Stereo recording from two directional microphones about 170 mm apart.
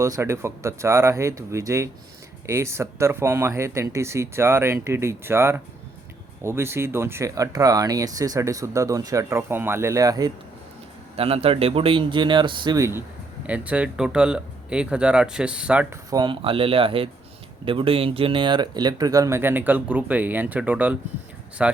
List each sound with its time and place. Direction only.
0.0 s speech: 15° right (ahead or behind)
11.2 s speech: 35° right (ahead or behind); by 16.0 s 10° right (ahead or behind)
16.0 s speech: 25° right (ahead or behind); by 21.8 s 5° right (ahead or behind)